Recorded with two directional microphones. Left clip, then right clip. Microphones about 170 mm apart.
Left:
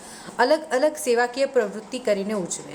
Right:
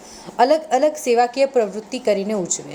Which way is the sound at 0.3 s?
15° right (ahead or behind).